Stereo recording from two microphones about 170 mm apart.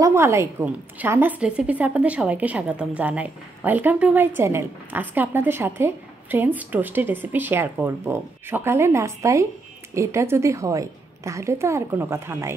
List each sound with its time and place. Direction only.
0.0 s a woman's voice: 15° right (ahead or behind)